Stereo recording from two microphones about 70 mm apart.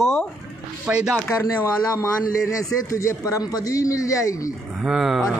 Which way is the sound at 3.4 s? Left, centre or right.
Left.